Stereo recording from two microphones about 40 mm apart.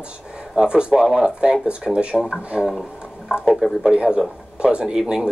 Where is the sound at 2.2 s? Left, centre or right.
Centre.